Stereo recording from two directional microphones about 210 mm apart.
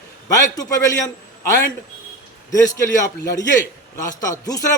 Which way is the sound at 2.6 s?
15° left (ahead or behind).